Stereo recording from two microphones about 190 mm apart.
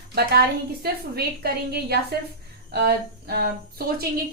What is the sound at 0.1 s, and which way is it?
A woman's voice, 55° right (ahead or behind).